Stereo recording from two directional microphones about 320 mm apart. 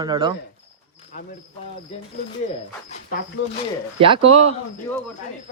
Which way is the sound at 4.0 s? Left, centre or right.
Centre.